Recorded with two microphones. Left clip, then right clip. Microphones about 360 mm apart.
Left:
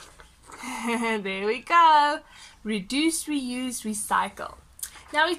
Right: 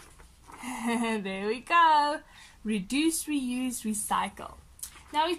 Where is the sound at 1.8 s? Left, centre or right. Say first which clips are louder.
Left 5 dB; centre.